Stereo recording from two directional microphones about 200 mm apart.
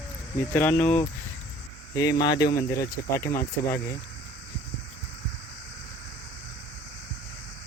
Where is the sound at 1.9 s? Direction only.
20° left (ahead or behind).